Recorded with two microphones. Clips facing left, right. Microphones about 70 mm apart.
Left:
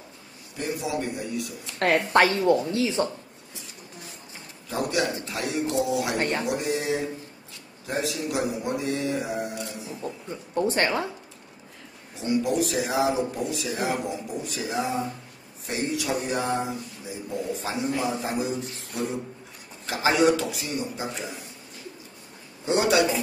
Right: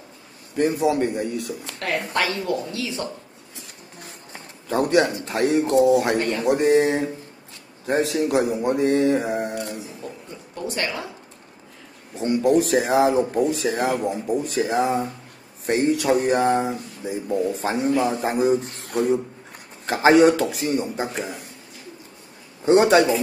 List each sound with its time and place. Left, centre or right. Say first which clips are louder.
0.6 s speech: right 9 dB; right
1.8 s speech: left 5 dB; left
4.0 s a sound: right 3 dB; right
5.2 s speech: right 8 dB; right
6.1 s a woman's voice: right 3 dB; left
6.4 s speech: right 9 dB; right
10.0 s a man's voice: left 2 dB; left
12.2 s speech: right 6 dB; right
19.9 s speech: right 6 dB; right
22.7 s a man's voice: right 6 dB; right